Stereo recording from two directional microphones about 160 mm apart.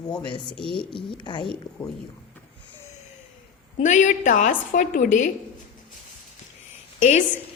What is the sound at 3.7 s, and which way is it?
A woman's voice, 50° left (ahead or behind).